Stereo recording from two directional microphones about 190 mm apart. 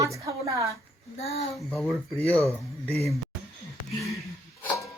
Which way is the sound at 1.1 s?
35° left (ahead or behind).